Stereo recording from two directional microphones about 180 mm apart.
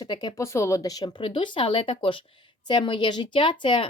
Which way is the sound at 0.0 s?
20° left (ahead or behind).